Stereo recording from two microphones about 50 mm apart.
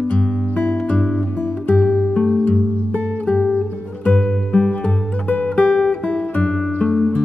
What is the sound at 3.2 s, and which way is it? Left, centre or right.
Music, centre.